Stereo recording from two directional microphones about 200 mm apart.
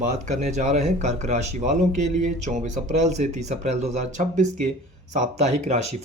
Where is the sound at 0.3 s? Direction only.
35° right (ahead or behind).